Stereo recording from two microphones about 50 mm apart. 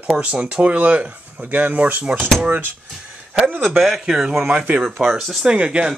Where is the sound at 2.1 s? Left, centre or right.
Centre.